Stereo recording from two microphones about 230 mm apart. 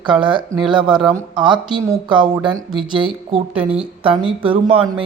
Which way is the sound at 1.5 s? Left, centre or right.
Right.